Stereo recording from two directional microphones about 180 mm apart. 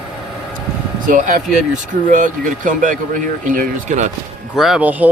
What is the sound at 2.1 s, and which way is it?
Speech, 45° right (ahead or behind).